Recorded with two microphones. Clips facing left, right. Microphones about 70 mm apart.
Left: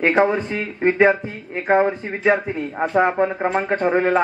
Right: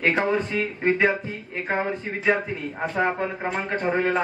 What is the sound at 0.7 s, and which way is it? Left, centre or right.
Speech, left.